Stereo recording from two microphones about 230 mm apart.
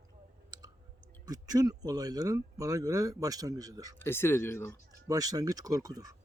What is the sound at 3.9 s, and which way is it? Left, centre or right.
Speech, centre.